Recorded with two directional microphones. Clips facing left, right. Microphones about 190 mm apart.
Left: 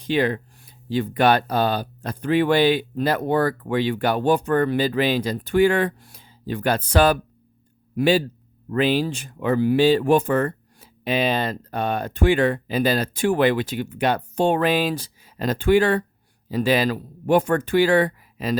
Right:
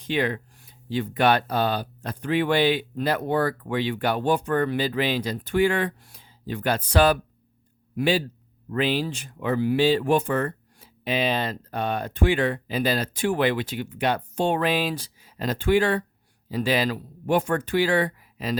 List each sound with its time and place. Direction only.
0.0 s speech: 35° left (ahead or behind)